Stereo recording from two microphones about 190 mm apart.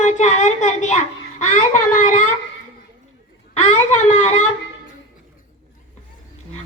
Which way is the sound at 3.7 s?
35° left (ahead or behind).